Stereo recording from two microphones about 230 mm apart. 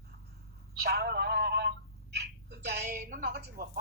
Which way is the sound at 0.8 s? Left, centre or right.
Right.